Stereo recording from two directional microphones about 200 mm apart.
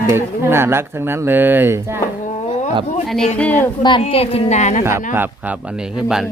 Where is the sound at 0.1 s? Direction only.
10° right (ahead or behind).